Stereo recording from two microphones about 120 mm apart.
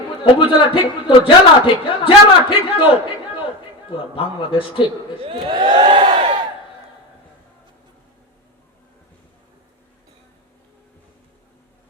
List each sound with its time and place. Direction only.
0.3 s a man's voice: 45° left (ahead or behind)
3.9 s a man's voice: 45° left (ahead or behind)
5.5 s crowd: 40° right (ahead or behind)